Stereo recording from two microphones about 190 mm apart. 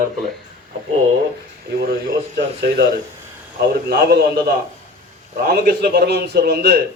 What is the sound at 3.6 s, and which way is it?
A man's voice, 55° right (ahead or behind).